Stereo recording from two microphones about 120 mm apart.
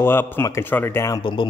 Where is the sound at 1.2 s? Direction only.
45° left (ahead or behind).